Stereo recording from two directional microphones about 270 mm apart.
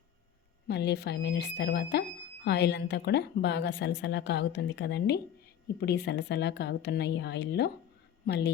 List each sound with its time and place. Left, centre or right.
0.7 s speech: left